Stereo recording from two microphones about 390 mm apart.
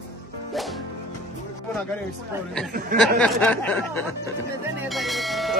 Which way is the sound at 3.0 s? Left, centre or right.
Centre.